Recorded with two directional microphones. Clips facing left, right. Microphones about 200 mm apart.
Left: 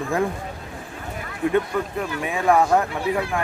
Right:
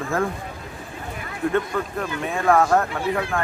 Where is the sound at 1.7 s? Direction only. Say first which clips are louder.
Left 1 dB; 10° left (ahead or behind).